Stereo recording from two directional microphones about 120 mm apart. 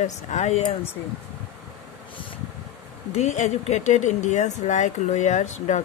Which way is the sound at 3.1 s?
75° left (ahead or behind).